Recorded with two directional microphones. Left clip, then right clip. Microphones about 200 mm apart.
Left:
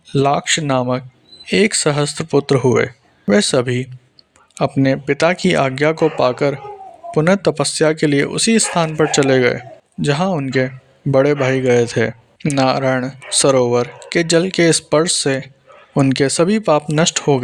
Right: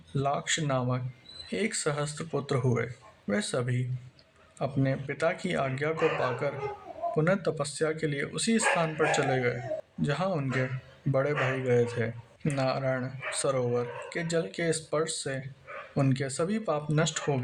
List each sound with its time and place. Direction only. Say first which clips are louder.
0.1 s speech: left 14 dB; 40° left (ahead or behind)